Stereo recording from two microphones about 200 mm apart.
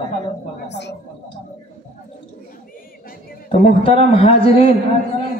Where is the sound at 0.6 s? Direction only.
60° left (ahead or behind).